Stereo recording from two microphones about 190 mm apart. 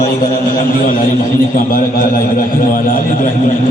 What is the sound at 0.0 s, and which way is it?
A man's voice, 45° left (ahead or behind).